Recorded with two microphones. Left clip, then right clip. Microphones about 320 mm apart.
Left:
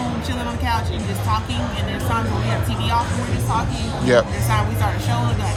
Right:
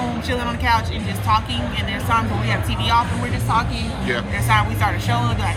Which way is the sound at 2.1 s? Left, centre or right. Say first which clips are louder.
Right 4 dB; centre.